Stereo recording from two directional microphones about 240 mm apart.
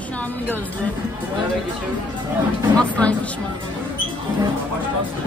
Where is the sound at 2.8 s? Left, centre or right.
Centre.